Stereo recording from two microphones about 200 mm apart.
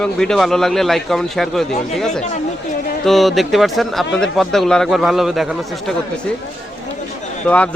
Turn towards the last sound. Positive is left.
turn(degrees=5)  # may be behind; listen again after turning